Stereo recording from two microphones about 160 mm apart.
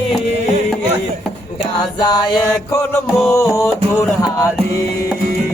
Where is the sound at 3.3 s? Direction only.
15° left (ahead or behind).